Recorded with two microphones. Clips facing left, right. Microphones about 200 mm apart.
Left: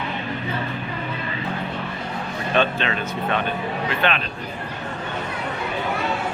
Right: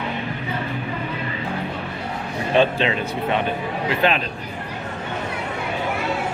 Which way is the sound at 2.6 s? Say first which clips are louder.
Right 4 dB; 25° right (ahead or behind).